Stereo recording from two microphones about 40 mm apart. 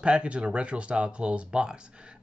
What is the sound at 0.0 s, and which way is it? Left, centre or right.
Speech, right.